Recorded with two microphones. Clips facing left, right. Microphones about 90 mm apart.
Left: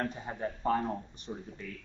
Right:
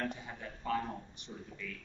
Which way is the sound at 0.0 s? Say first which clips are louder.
Left 5 dB; 40° left (ahead or behind).